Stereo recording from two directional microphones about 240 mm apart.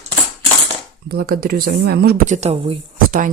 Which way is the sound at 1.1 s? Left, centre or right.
Right.